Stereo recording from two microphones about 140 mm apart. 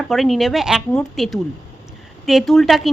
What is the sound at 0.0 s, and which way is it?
A woman's voice, centre (ahead or behind).